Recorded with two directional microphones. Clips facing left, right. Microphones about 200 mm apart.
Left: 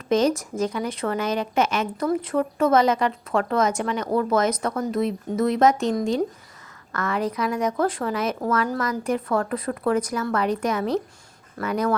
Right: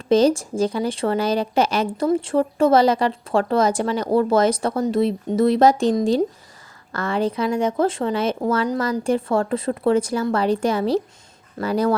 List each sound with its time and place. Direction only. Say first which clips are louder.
0.1 s speech: right 4 dB; 30° right (ahead or behind)